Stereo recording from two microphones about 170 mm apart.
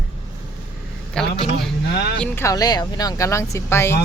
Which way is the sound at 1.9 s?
70° left (ahead or behind).